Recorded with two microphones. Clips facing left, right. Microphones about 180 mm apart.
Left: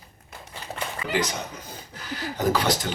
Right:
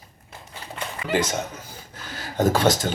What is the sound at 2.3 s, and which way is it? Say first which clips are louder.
Speech: right 3 dB; 50° right (ahead or behind).